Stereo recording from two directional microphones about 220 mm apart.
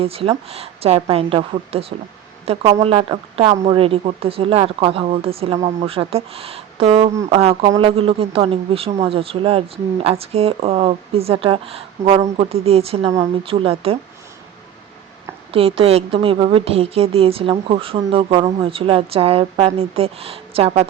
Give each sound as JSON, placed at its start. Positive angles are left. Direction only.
{"t": 0.0, "sound": "a woman's voice", "side_deg": -25}
{"t": 15.5, "sound": "a woman's voice", "side_deg": -25}